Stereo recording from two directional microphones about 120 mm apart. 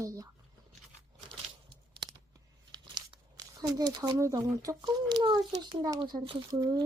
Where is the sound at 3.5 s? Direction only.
35° right (ahead or behind).